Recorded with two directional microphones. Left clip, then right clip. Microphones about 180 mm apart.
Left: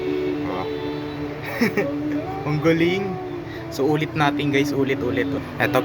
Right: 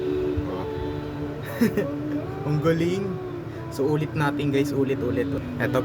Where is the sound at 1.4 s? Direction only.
25° right (ahead or behind).